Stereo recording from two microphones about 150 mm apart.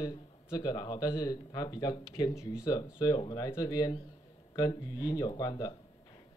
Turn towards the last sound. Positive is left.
turn(degrees=30)  # may be behind; listen again after turning